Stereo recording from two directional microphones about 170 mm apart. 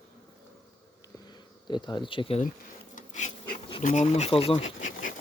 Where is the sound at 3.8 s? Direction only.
45° left (ahead or behind).